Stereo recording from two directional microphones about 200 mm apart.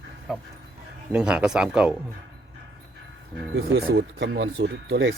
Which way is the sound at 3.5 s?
60° right (ahead or behind).